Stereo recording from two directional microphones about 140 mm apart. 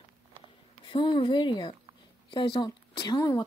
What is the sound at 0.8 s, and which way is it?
Speech, 35° left (ahead or behind).